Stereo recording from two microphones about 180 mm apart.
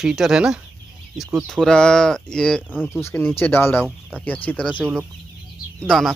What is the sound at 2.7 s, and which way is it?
Speech, 5° right (ahead or behind).